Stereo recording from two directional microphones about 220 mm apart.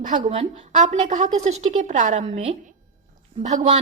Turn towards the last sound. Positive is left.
turn(degrees=-35)  # may be behind; listen again after turning